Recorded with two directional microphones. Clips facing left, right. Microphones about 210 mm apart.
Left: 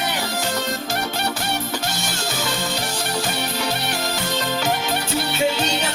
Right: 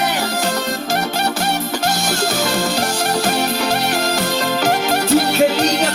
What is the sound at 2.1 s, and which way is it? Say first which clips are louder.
Music: right 7 dB; 90° right.